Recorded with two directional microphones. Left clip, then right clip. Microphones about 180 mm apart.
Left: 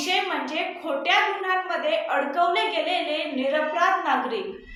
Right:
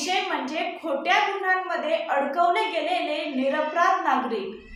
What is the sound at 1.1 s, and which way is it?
A woman's voice, 5° right (ahead or behind).